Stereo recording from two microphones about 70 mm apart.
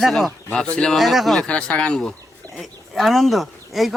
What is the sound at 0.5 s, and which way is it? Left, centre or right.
Speech, centre.